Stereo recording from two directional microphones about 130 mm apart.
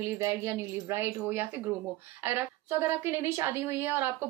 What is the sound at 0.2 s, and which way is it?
A woman's voice, 20° right (ahead or behind).